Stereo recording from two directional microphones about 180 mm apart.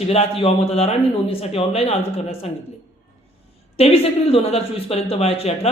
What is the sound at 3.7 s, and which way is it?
A man's voice, 35° left (ahead or behind).